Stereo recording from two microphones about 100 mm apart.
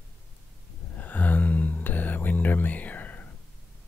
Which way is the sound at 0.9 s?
15° left (ahead or behind).